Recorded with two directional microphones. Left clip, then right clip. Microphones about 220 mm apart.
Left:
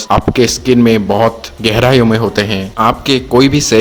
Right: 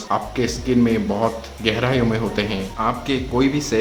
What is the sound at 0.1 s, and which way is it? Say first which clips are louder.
A man's voice: left 11 dB; 45° left (ahead or behind).